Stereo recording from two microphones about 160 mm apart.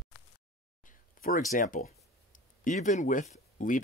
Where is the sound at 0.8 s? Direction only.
60° left (ahead or behind).